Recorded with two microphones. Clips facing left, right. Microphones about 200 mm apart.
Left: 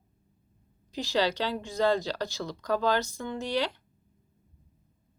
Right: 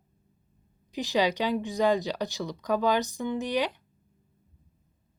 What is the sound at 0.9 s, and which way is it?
Speech, 15° right (ahead or behind).